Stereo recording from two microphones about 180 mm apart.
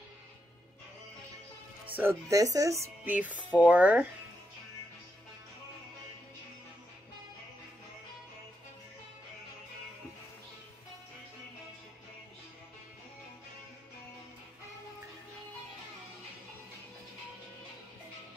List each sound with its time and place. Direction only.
1.9 s speech: 10° right (ahead or behind)